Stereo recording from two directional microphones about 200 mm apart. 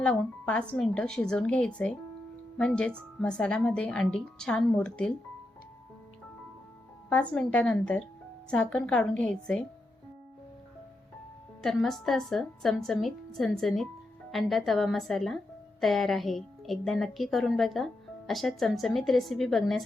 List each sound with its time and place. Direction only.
0.0 s a woman's voice: 5° left (ahead or behind)
7.1 s a woman's voice: 5° left (ahead or behind)
11.6 s a woman's voice: centre (ahead or behind)